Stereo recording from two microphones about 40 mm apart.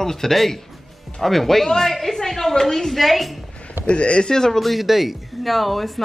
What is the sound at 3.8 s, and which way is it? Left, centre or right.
Speech, left.